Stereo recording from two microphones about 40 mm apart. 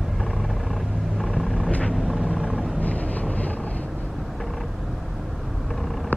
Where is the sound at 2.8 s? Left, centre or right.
Left.